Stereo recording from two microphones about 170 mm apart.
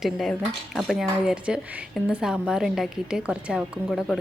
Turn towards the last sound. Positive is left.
turn(degrees=0)  # may be behind; listen again after turning